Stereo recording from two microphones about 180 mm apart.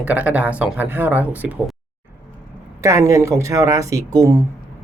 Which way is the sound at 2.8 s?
15° right (ahead or behind).